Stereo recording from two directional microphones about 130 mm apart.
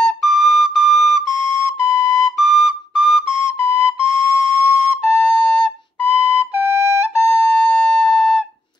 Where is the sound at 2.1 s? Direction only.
Centre (ahead or behind).